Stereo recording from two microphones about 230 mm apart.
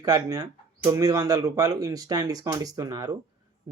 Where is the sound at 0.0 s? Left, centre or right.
Centre.